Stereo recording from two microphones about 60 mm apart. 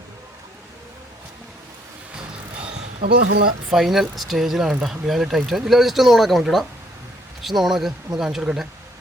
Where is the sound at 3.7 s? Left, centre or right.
Centre.